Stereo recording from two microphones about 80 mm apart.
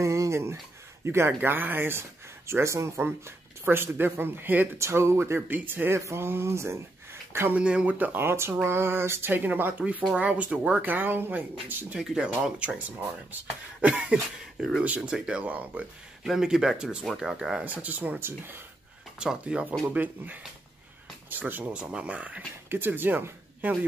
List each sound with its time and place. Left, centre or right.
0.0 s a sound: right
1.0 s speech: right
4.7 s speech: right
7.5 s speech: centre
12.0 s speech: centre
16.3 s speech: centre
17.6 s speech: right
19.1 s speech: centre